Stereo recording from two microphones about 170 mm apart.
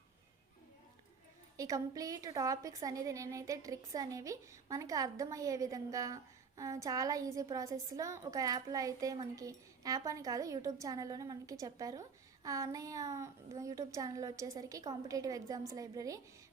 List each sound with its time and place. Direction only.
1.5 s speech: 20° right (ahead or behind)